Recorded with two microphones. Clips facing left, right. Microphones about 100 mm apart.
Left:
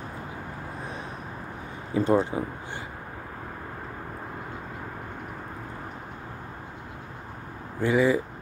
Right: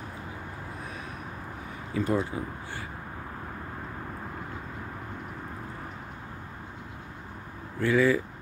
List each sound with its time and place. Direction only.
2.0 s speech: 30° left (ahead or behind)
7.8 s speech: 20° left (ahead or behind)